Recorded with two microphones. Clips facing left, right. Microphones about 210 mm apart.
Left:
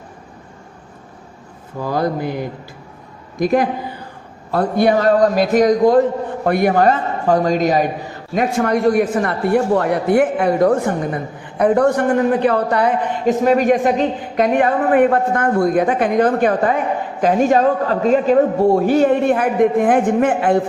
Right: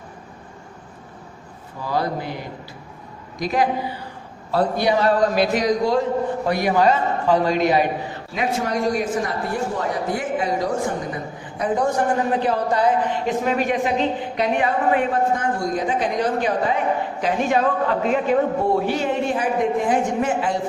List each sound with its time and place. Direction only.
1.8 s speech: 50° left (ahead or behind)
3.3 s speech: 50° left (ahead or behind)
8.5 s speech: 55° left (ahead or behind)
13.2 s speech: 45° left (ahead or behind); by 20.6 s 60° left (ahead or behind)